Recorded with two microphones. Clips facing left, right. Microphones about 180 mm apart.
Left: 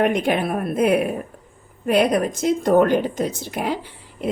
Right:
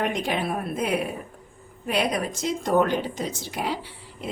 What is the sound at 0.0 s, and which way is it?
A woman's voice, 55° left (ahead or behind).